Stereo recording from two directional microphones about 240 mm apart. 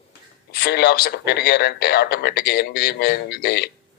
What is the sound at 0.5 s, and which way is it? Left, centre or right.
A man's voice, left.